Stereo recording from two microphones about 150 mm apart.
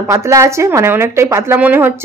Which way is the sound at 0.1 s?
20° right (ahead or behind).